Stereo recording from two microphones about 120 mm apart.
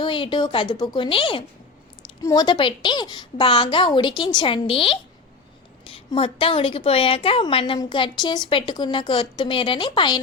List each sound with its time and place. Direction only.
0.0 s a woman's voice: 45° left (ahead or behind)
2.2 s a woman's voice: 35° left (ahead or behind)